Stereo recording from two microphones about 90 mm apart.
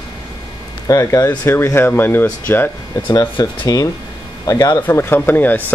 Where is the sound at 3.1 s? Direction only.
55° left (ahead or behind).